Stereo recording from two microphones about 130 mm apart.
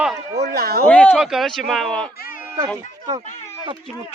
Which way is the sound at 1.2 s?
Centre (ahead or behind).